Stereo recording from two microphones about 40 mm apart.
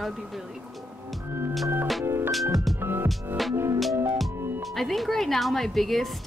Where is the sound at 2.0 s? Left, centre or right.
Right.